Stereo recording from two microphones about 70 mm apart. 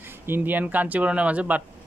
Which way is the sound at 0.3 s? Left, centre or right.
Right.